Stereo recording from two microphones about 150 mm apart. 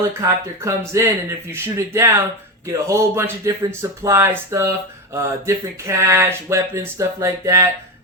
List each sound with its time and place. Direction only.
0.2 s speech: 20° right (ahead or behind)
5.8 s speech: 20° right (ahead or behind)